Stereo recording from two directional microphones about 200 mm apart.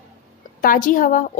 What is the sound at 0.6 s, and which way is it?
Speech, 45° left (ahead or behind).